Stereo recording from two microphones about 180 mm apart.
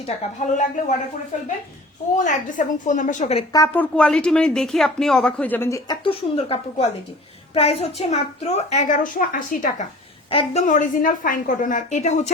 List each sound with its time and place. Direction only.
0.0 s a woman's voice: 40° left (ahead or behind)
3.5 s speech: 15° left (ahead or behind)
3.9 s a woman's voice: 5° left (ahead or behind); by 9.8 s 45° left (ahead or behind)
10.2 s a woman's voice: 30° left (ahead or behind)
10.7 s a woman's voice: 45° left (ahead or behind)